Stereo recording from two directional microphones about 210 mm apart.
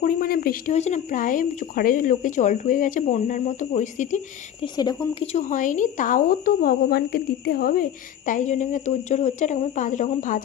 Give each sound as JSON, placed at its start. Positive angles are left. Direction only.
{"t": 0.0, "sound": "speech", "side_deg": 45}
{"t": 4.6, "sound": "speech", "side_deg": 20}